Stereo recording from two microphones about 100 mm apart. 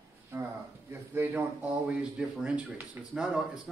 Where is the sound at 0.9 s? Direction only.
20° right (ahead or behind).